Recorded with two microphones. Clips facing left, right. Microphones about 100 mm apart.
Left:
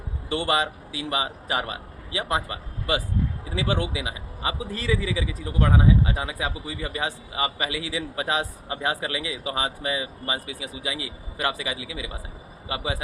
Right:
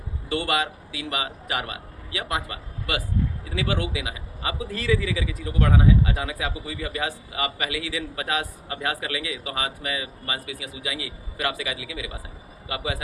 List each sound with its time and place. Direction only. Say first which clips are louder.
0.3 s a man's voice: left 1 dB; 25° left (ahead or behind)